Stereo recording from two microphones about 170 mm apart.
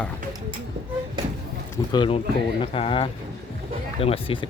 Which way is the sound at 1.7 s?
25° left (ahead or behind).